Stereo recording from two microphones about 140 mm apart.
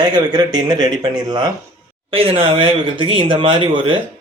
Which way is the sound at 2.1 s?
40° right (ahead or behind).